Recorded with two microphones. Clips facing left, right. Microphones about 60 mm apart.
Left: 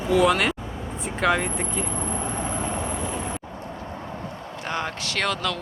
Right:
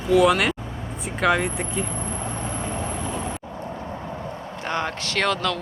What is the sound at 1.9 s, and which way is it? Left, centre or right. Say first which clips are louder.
Vehicle: left 1 dB; centre.